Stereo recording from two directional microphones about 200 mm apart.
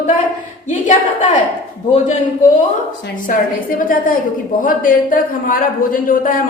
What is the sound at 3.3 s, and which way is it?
A man's voice, 45° left (ahead or behind).